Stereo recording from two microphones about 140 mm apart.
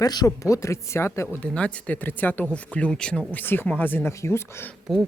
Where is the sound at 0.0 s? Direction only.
30° left (ahead or behind).